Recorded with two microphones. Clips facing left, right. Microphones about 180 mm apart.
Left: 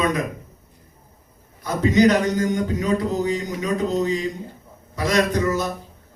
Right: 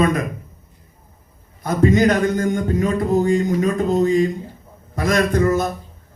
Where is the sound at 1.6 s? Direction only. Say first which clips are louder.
Right 2 dB; 50° right (ahead or behind).